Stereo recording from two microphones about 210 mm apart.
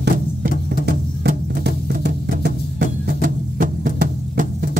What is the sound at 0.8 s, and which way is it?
Music, 50° right (ahead or behind).